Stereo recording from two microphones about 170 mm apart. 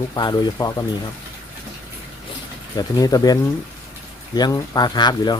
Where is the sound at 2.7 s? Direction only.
20° left (ahead or behind).